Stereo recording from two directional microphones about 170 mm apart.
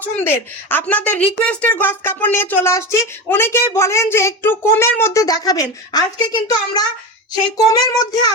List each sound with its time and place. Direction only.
0.0 s a woman's voice: 10° left (ahead or behind)
7.5 s child singing: 20° left (ahead or behind)